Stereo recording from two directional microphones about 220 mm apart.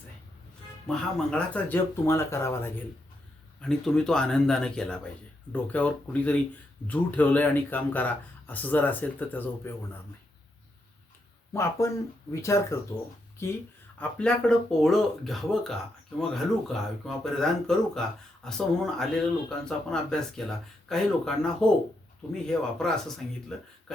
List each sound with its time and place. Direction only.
0.9 s speech: 5° left (ahead or behind)
11.5 s speech: 10° left (ahead or behind)
14.0 s speech: 5° left (ahead or behind)